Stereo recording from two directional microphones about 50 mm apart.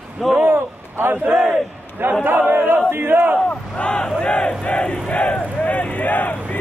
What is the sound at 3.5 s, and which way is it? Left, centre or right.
Speech, left.